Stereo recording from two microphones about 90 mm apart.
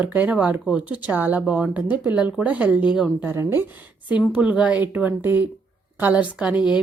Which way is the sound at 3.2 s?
25° right (ahead or behind).